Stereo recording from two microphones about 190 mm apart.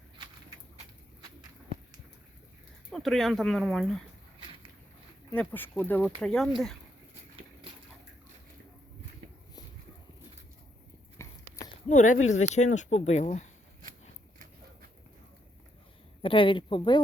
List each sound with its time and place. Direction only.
2.9 s speech: centre (ahead or behind)
5.3 s speech: 5° left (ahead or behind)
11.2 s a sound: 15° left (ahead or behind)
11.9 s speech: 40° left (ahead or behind)
16.2 s speech: 25° left (ahead or behind)